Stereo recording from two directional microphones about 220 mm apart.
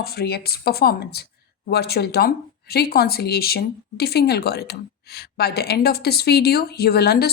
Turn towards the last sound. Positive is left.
turn(degrees=45)  # may be behind; listen again after turning